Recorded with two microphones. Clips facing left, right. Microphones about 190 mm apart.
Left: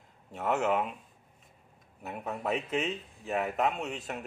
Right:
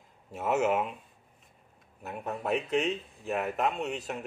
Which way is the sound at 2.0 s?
Centre (ahead or behind).